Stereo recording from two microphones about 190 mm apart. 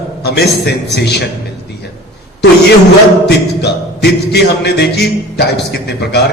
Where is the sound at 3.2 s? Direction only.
60° left (ahead or behind).